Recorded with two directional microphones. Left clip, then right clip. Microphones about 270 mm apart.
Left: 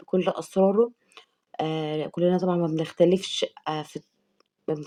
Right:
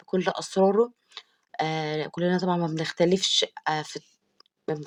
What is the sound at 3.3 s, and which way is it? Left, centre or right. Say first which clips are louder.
Speech: right 4 dB; right.